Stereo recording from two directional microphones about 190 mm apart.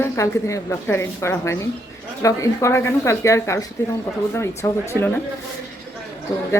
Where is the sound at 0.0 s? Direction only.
15° left (ahead or behind).